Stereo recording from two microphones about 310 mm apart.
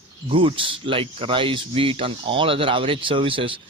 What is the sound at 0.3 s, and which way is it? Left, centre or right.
Speech, centre.